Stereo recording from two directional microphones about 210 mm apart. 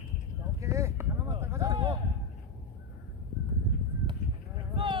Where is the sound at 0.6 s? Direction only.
15° right (ahead or behind).